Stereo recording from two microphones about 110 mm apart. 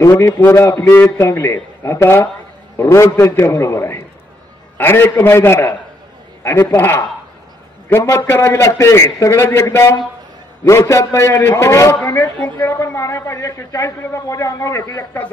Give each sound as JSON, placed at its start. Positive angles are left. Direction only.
{"t": 0.1, "sound": "a man's voice", "side_deg": 15}